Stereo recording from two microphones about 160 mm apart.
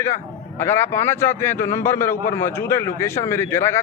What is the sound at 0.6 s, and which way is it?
A man's voice, 15° left (ahead or behind).